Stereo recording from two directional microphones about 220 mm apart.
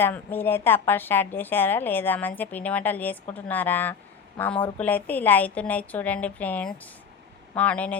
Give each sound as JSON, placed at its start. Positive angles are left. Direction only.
{"t": 0.0, "sound": "a woman's voice", "side_deg": 10}